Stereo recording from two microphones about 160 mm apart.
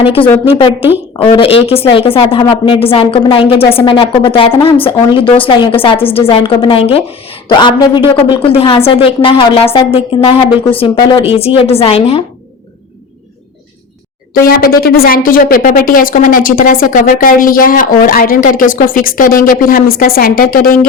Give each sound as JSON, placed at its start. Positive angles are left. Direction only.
{"t": 0.0, "sound": "a woman's voice", "side_deg": 35}
{"t": 11.3, "sound": "a woman's voice", "side_deg": 40}
{"t": 14.3, "sound": "speech", "side_deg": 65}